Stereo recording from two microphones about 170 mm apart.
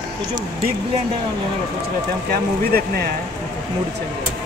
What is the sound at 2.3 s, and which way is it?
Speech, 65° right (ahead or behind).